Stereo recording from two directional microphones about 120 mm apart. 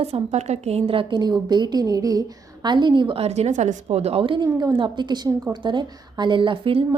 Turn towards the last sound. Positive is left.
turn(degrees=-45)  # may be behind; listen again after turning